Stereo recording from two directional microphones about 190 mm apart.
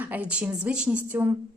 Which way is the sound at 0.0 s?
10° right (ahead or behind).